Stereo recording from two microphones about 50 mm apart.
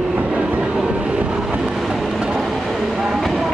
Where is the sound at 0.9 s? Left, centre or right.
Right.